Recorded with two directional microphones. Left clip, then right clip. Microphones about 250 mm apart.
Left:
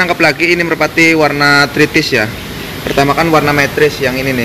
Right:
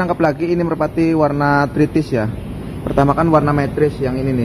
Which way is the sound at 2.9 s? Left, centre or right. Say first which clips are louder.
Left 4 dB; centre.